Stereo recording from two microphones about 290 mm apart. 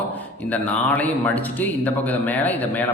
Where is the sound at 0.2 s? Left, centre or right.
Centre.